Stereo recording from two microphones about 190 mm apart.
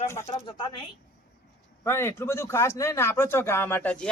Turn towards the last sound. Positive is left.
turn(degrees=5)  # may be behind; listen again after turning